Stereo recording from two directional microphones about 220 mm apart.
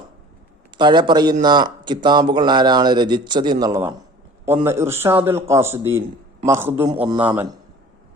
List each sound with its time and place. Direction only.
0.8 s a man's voice: 20° right (ahead or behind)